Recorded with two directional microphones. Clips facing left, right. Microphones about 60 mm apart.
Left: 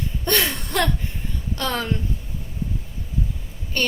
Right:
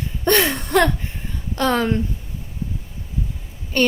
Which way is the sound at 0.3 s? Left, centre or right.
Right.